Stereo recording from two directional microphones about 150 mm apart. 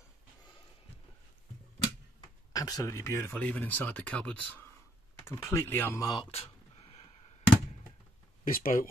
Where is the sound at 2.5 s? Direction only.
25° left (ahead or behind).